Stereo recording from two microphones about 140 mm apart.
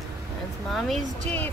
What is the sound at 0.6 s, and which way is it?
Speech, centre (ahead or behind).